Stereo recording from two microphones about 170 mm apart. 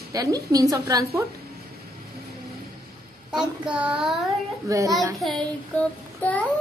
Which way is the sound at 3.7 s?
5° right (ahead or behind).